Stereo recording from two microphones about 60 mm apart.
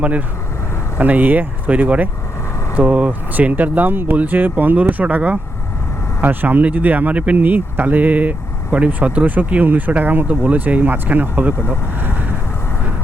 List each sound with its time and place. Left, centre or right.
0.0 s speech: right